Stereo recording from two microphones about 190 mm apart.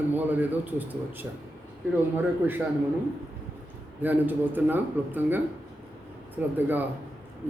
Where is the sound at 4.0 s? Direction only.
10° right (ahead or behind).